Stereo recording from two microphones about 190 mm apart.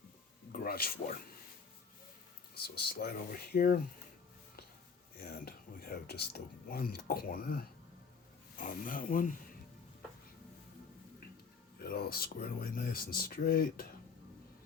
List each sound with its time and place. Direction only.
0.5 s speech: 50° left (ahead or behind)
2.6 s speech: 55° left (ahead or behind)
5.3 s speech: 55° left (ahead or behind)
11.8 s speech: 55° left (ahead or behind)